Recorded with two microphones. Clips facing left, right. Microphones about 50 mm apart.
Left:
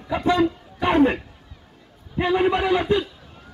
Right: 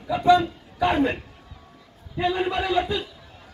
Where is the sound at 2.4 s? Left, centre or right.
Left.